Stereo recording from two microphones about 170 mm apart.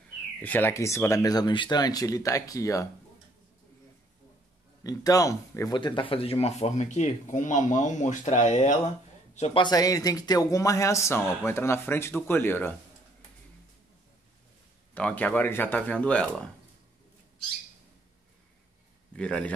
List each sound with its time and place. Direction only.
0.4 s speech: 10° left (ahead or behind)
4.8 s speech: 20° left (ahead or behind)
15.0 s speech: 5° left (ahead or behind)
19.1 s a man's voice: 5° left (ahead or behind)